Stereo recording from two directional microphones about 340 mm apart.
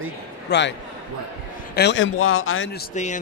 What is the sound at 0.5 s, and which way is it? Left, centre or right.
Speech, left.